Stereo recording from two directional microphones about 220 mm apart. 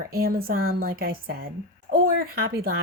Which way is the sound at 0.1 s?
45° right (ahead or behind).